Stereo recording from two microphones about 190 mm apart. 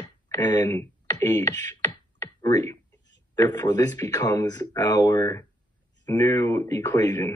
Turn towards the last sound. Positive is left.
turn(degrees=10)  # may be behind; listen again after turning